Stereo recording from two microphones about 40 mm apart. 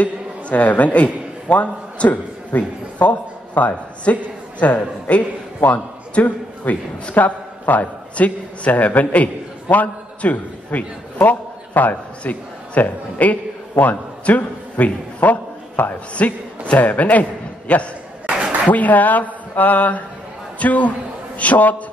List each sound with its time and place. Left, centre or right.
0.0 s a man's voice: left